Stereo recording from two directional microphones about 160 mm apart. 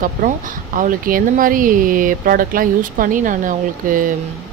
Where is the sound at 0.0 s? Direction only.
55° right (ahead or behind).